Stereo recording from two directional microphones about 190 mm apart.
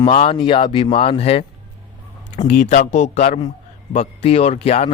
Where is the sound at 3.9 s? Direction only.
35° left (ahead or behind).